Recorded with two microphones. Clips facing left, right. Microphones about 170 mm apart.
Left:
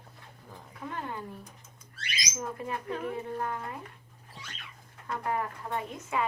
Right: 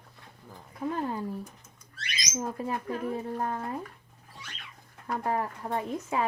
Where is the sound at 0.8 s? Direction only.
35° right (ahead or behind).